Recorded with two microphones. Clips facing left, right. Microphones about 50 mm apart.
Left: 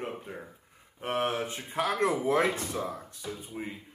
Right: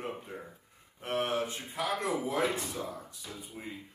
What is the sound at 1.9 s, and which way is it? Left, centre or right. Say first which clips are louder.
A man's voice: left 6 dB; centre.